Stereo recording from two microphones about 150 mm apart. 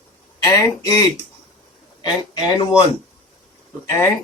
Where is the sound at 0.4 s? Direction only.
20° left (ahead or behind).